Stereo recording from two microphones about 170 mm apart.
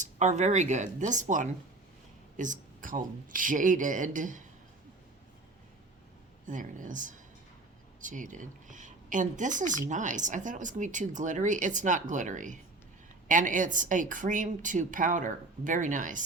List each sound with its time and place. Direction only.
0.0 s a woman's voice: 45° right (ahead or behind)
6.5 s a woman's voice: 50° right (ahead or behind)